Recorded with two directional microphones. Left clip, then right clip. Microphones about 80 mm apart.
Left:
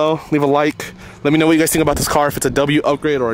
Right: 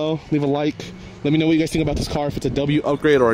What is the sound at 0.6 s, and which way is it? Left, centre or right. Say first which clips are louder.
Speech: left 7 dB; left.